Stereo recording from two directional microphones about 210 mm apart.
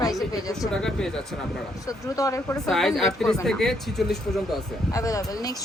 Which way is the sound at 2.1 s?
15° left (ahead or behind).